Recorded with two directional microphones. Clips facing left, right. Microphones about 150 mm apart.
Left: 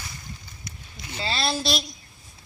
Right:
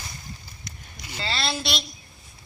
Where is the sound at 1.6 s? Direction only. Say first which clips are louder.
Left 3 dB; 40° left (ahead or behind).